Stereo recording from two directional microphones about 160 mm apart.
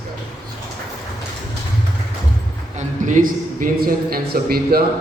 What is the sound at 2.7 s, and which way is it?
A man's voice, 50° right (ahead or behind).